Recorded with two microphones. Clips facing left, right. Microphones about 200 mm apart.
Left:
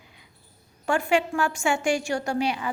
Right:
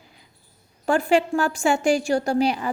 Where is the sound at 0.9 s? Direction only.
35° right (ahead or behind).